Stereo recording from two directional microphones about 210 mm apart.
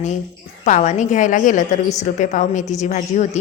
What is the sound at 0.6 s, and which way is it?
A woman's voice, 35° left (ahead or behind).